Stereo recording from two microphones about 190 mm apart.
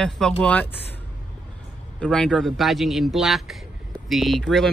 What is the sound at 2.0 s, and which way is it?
A man's voice, 5° left (ahead or behind).